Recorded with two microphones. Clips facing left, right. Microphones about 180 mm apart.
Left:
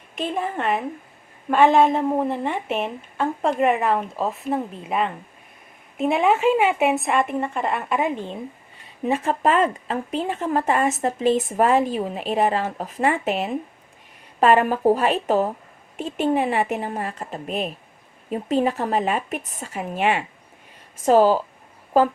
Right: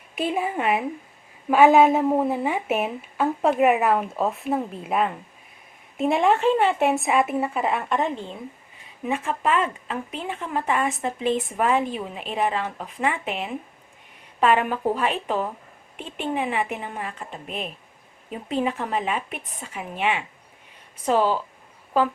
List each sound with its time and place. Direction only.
0.2 s a woman's voice: 5° right (ahead or behind); by 8.4 s 15° left (ahead or behind)
9.0 s a woman's voice: 35° left (ahead or behind)